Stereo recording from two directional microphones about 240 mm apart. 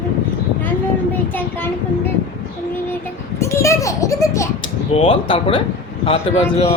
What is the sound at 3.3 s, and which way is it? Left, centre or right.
A child's voice, centre.